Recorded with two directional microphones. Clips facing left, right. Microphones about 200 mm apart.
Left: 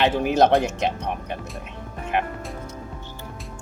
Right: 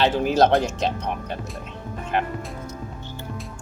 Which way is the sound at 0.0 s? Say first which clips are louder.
Even; 20° left (ahead or behind).